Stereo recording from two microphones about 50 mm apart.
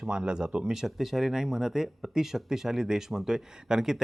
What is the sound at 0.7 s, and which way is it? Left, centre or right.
Speech, centre.